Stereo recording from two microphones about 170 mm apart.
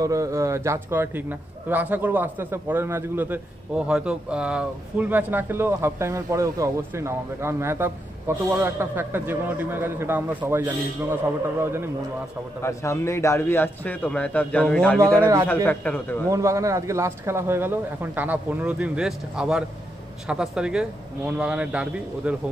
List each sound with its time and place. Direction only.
0.0 s a man's voice: 20° right (ahead or behind)
12.6 s a man's voice: 15° left (ahead or behind)
15.1 s a man's voice: 25° right (ahead or behind)
15.4 s a man's voice: 10° left (ahead or behind)
16.3 s a man's voice: 20° right (ahead or behind)